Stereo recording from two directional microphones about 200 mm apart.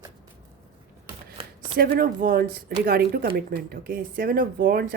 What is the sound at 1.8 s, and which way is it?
Speech, 45° right (ahead or behind).